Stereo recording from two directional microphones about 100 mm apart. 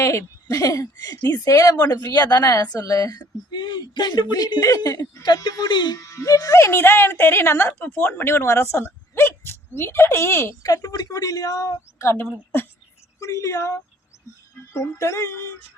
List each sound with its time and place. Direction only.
0.0 s a woman's voice: 30° left (ahead or behind)
5.2 s speech: 45° left (ahead or behind)
6.0 s speech: 35° left (ahead or behind)
10.7 s a woman's voice: 35° left (ahead or behind)